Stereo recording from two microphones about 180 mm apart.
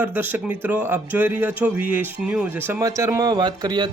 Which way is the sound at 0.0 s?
10° right (ahead or behind).